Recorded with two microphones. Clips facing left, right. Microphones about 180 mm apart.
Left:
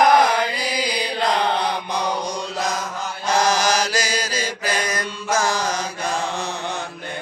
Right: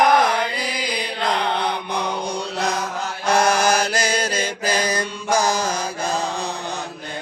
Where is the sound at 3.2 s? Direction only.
60° right (ahead or behind).